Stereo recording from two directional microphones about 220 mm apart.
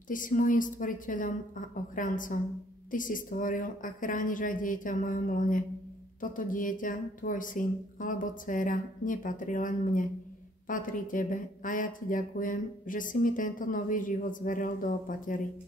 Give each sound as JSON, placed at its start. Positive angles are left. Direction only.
{"t": 0.1, "sound": "speech", "side_deg": 35}